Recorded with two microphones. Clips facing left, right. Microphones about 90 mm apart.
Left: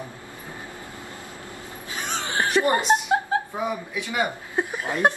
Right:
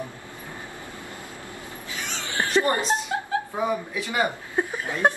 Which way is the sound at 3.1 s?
30° left (ahead or behind).